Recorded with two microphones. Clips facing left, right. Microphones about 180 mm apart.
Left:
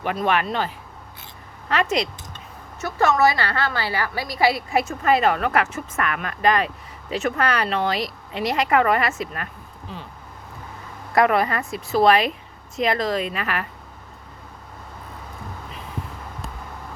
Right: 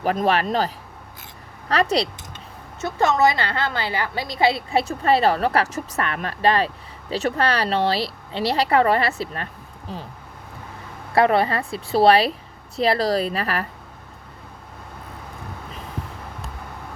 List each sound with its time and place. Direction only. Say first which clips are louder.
0.0 s a woman's voice: right 2 dB; 40° right (ahead or behind)
1.7 s a woman's voice: right 2 dB; 35° right (ahead or behind)
2.8 s a woman's voice: even; 20° right (ahead or behind); by 10.0 s 40° right (ahead or behind)
11.1 s a woman's voice: right 1 dB; 30° right (ahead or behind)